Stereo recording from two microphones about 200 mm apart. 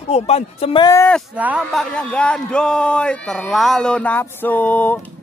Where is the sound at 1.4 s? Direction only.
5° right (ahead or behind).